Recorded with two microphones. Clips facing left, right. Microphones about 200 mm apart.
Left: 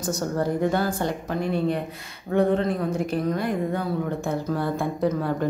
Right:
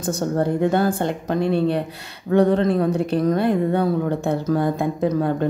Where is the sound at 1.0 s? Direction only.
30° right (ahead or behind).